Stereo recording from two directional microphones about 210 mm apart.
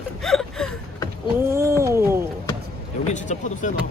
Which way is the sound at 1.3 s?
10° right (ahead or behind).